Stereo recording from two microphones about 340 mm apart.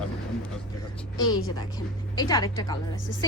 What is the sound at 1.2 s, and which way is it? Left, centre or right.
Speech, centre.